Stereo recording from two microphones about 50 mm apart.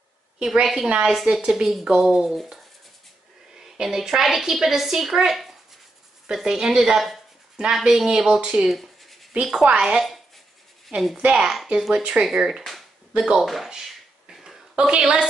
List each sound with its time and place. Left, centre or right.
1.0 s speech: centre
3.5 s a woman's voice: centre
8.7 s rub: centre
9.4 s speech: centre
13.7 s a sound: centre
14.8 s speech: centre